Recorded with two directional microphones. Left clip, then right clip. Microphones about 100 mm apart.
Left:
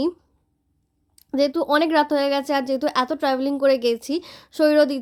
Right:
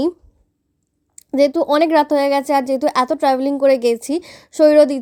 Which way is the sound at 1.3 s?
35° right (ahead or behind).